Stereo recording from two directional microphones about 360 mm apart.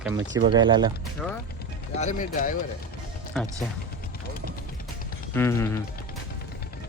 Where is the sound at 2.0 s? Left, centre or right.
Left.